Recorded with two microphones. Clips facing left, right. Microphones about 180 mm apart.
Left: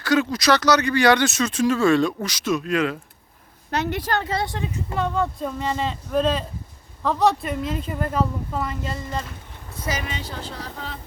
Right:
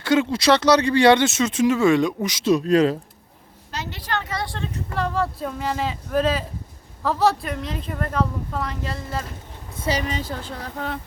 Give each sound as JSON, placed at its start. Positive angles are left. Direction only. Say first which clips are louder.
{"t": 0.0, "sound": "speech", "louder": "right 1 dB", "side_deg": -25}
{"t": 2.4, "sound": "speech", "louder": "right 5 dB", "side_deg": -35}
{"t": 3.7, "sound": "a woman's voice", "louder": "left 5 dB", "side_deg": 60}
{"t": 4.3, "sound": "speech", "louder": "left 3 dB", "side_deg": 25}
{"t": 4.9, "sound": "speech", "louder": "even", "side_deg": 0}
{"t": 9.8, "sound": "a woman's voice", "louder": "right 5 dB", "side_deg": -35}